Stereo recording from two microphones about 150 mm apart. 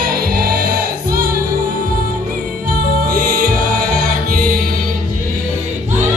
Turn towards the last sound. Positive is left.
turn(degrees=-85)